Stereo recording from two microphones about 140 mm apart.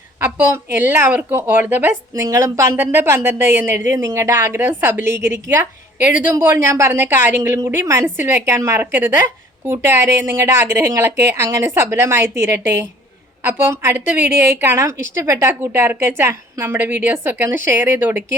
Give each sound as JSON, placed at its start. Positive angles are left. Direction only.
{"t": 0.2, "sound": "a woman's voice", "side_deg": -10}